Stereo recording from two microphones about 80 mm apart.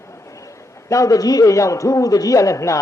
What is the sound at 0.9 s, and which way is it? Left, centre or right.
A man's voice, left.